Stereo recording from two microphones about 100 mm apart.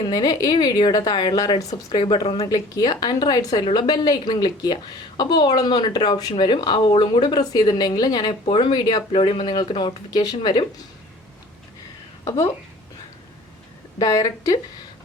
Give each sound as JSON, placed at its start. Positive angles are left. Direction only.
{"t": 0.1, "sound": "a woman's voice", "side_deg": 40}
{"t": 2.4, "sound": "speech", "side_deg": 40}
{"t": 3.6, "sound": "a woman's voice", "side_deg": 50}
{"t": 12.2, "sound": "speech", "side_deg": 30}
{"t": 14.0, "sound": "speech", "side_deg": 35}